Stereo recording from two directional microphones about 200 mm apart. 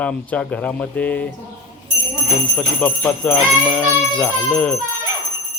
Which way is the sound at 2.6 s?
5° left (ahead or behind).